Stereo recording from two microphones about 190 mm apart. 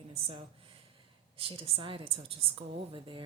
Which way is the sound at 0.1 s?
30° right (ahead or behind).